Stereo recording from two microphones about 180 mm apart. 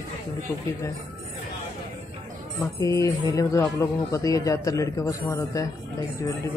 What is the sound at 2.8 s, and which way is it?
Speech, 15° left (ahead or behind).